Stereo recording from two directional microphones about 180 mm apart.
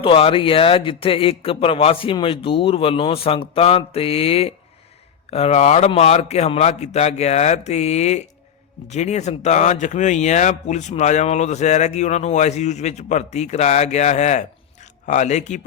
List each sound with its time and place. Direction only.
0.0 s speech: 30° left (ahead or behind)